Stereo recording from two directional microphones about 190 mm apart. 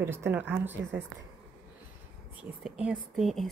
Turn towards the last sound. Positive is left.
turn(degrees=0)  # may be behind; listen again after turning